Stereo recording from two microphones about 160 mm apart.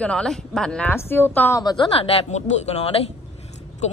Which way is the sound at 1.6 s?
30° left (ahead or behind).